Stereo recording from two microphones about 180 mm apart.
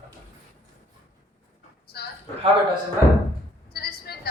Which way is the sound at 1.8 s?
60° left (ahead or behind).